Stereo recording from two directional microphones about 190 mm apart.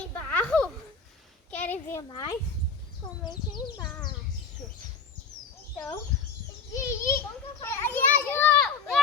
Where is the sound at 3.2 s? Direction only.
20° left (ahead or behind).